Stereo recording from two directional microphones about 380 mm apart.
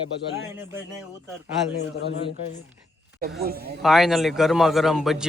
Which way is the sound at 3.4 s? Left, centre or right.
Right.